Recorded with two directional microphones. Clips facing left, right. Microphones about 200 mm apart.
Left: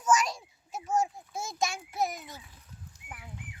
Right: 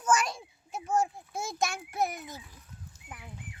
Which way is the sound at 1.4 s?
55° right (ahead or behind).